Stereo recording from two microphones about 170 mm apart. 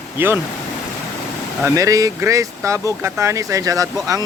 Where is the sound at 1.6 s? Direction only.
20° right (ahead or behind).